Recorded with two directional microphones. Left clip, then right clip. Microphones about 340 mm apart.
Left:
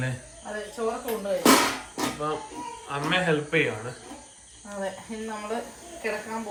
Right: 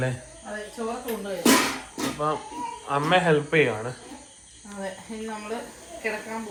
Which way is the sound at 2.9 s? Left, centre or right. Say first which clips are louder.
Right 4 dB; centre.